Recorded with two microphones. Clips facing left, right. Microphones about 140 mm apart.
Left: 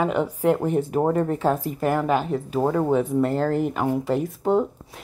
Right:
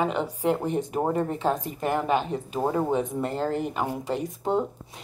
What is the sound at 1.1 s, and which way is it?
Speech, 20° right (ahead or behind).